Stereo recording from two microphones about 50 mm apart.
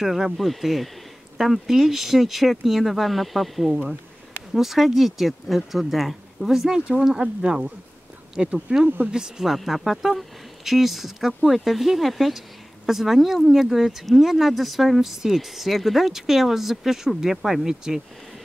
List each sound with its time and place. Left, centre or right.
0.0 s speech: centre
8.8 s speech: right
9.1 s speech: centre
9.5 s speech: centre